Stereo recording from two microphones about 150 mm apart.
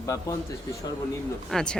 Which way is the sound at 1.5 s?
5° left (ahead or behind).